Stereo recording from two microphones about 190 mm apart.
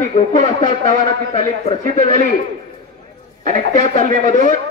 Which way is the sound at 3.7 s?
40° left (ahead or behind).